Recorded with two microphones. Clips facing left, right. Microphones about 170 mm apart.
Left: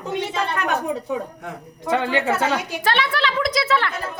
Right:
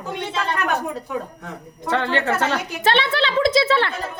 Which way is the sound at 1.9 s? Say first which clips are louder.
Left 1 dB; 10° left (ahead or behind).